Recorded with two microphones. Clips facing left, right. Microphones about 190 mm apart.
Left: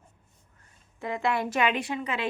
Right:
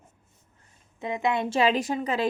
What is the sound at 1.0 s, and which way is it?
A woman's voice, 20° right (ahead or behind).